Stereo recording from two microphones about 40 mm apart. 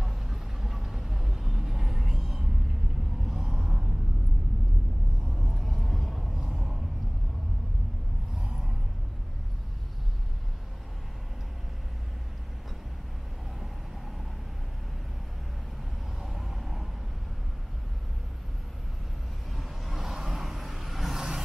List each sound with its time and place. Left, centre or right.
0.0 s vehicle: centre
3.3 s a sound: centre
5.3 s vehicle: centre
6.3 s a sound: centre
16.2 s vehicle: centre
19.5 s vehicle: centre